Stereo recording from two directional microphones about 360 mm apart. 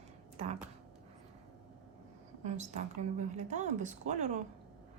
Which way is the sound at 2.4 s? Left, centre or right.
Centre.